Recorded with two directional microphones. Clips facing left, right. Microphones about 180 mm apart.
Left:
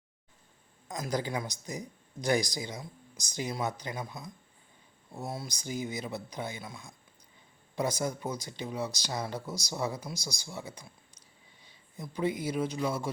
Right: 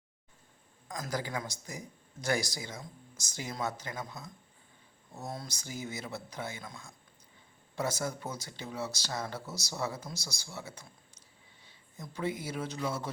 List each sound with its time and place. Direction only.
0.9 s a man's voice: 20° left (ahead or behind)